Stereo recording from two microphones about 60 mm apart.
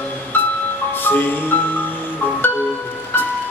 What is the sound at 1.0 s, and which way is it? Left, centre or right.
Music, left.